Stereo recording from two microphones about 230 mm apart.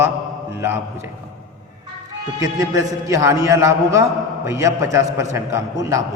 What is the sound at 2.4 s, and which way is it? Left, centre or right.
A man's voice, centre.